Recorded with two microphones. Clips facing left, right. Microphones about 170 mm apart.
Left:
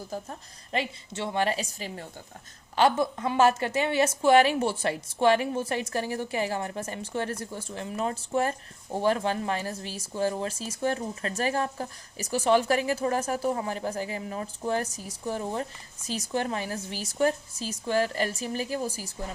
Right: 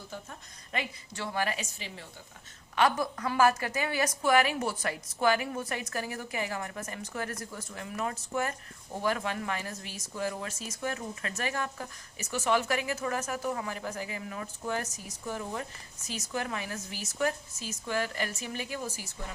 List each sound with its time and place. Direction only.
0.1 s a woman's voice: 35° left (ahead or behind)